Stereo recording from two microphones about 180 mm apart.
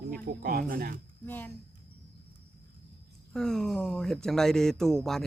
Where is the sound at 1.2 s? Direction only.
10° left (ahead or behind).